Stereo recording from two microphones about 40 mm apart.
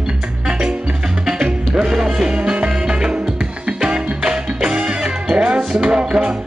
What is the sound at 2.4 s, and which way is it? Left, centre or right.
Music, right.